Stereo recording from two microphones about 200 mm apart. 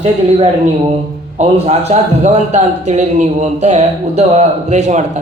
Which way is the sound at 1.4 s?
35° right (ahead or behind).